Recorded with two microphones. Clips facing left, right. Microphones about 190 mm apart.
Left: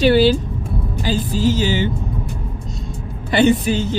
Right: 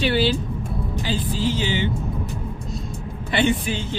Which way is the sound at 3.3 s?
40° left (ahead or behind).